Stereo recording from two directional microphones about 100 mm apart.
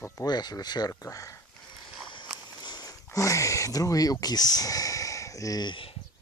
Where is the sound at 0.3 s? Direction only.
45° left (ahead or behind).